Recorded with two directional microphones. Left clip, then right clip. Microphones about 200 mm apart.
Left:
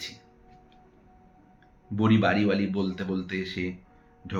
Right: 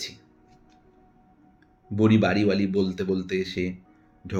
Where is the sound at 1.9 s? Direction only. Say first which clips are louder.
Right 2 dB; 40° right (ahead or behind).